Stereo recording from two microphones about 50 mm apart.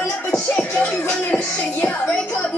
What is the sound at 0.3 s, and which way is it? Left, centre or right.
Music, left.